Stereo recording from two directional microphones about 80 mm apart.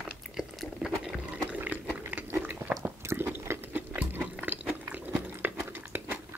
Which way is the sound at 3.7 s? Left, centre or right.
Right.